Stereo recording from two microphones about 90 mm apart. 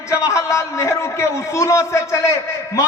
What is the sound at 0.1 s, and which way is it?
A man's voice, 35° left (ahead or behind).